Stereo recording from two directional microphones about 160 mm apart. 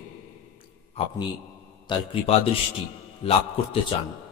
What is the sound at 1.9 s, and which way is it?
A man's voice, 35° left (ahead or behind).